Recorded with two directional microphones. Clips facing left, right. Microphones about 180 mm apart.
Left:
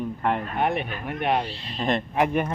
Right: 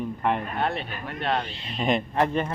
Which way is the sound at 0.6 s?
15° left (ahead or behind).